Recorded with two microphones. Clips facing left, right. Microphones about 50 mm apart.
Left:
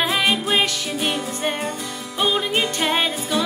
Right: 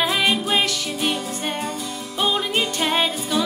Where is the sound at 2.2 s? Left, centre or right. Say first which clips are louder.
Left 1 dB; centre.